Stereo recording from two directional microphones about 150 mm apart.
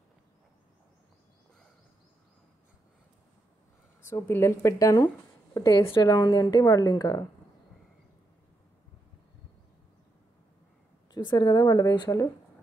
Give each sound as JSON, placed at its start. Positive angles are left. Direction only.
{"t": 4.0, "sound": "a woman's voice", "side_deg": 15}
{"t": 5.0, "sound": "a sound", "side_deg": 20}
{"t": 5.8, "sound": "a woman's voice", "side_deg": 35}
{"t": 11.1, "sound": "a woman's voice", "side_deg": 25}